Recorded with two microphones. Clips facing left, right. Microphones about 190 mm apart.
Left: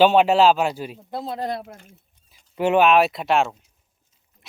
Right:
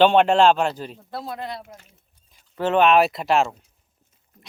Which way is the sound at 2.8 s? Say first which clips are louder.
Even; centre (ahead or behind).